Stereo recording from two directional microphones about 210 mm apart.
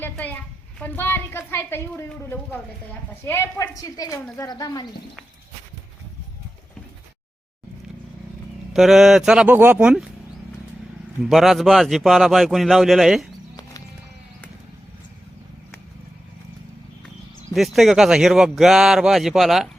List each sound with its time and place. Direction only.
0.0 s a sound: 10° left (ahead or behind)
0.8 s a woman's voice: 10° left (ahead or behind)
8.7 s speech: centre (ahead or behind)
11.2 s speech: centre (ahead or behind)
17.5 s speech: centre (ahead or behind)